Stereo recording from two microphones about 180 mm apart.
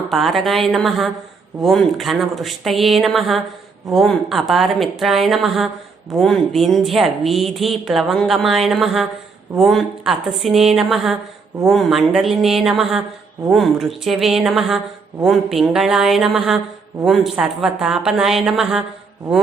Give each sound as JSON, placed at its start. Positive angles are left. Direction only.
{"t": 0.1, "sound": "a woman's voice", "side_deg": 0}